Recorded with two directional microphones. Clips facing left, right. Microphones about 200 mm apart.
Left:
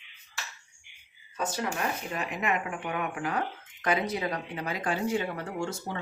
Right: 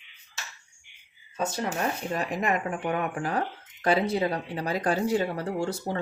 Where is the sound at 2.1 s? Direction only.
40° right (ahead or behind).